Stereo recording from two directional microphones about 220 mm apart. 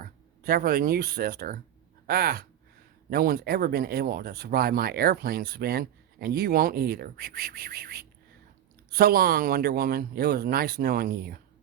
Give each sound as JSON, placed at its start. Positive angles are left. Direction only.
{"t": 0.4, "sound": "speech", "side_deg": -40}